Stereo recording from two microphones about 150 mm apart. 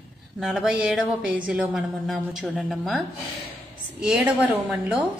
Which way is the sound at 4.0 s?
5° right (ahead or behind).